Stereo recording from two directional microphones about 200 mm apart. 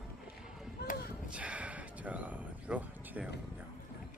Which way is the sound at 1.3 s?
5° right (ahead or behind).